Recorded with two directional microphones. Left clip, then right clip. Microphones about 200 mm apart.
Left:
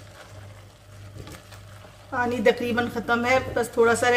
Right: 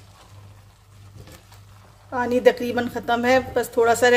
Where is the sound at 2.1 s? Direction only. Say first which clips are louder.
Right 3 dB; 40° right (ahead or behind).